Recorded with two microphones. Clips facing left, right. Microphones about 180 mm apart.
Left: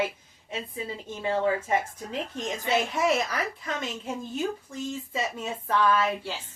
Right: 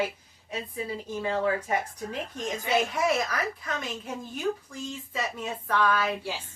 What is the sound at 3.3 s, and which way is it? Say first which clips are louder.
Speech: even; 25° left (ahead or behind).